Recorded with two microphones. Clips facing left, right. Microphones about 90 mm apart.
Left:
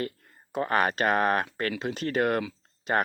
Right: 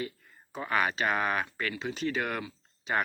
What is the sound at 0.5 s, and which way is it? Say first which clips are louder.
Speech: left 4 dB; 50° left (ahead or behind).